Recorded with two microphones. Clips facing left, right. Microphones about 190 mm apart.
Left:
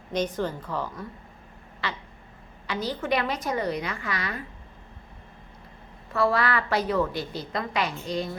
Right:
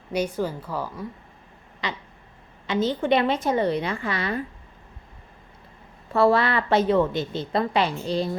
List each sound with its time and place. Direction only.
0.1 s a woman's voice: 10° right (ahead or behind); by 4.4 s 30° right (ahead or behind)
6.1 s a woman's voice: 30° right (ahead or behind)